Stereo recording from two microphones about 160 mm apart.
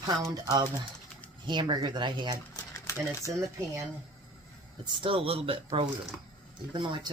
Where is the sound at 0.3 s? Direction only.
20° right (ahead or behind).